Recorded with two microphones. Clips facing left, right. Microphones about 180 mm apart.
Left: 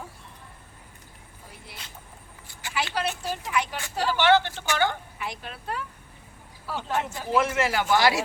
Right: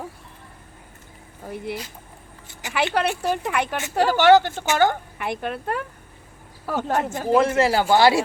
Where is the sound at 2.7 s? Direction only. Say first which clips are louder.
Right 7 dB; 60° right (ahead or behind).